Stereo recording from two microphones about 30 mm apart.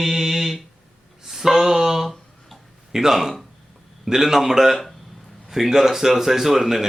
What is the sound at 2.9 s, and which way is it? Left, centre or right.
Speech, centre.